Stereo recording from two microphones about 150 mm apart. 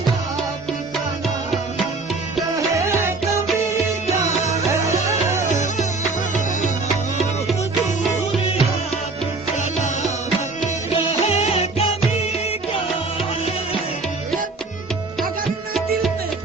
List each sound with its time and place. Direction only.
4.0 s music: 50° left (ahead or behind)
10.9 s music: 40° left (ahead or behind)